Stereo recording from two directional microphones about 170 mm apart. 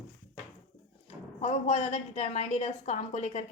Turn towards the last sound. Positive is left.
turn(degrees=40)  # may be behind; listen again after turning